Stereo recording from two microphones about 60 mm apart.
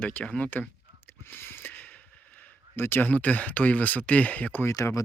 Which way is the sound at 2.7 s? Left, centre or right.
Left.